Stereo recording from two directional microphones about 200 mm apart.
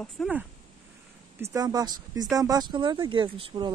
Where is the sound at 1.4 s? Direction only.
15° right (ahead or behind).